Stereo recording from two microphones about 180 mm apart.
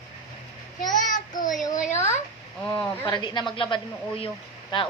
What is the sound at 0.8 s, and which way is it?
Child singing, 20° left (ahead or behind).